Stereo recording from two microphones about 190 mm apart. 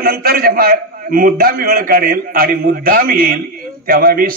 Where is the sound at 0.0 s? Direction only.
50° right (ahead or behind).